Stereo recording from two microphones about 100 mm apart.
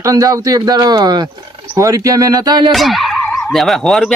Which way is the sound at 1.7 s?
35° right (ahead or behind).